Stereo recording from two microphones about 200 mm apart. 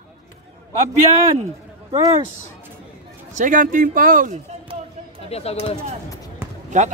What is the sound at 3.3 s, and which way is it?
Speech, 40° right (ahead or behind).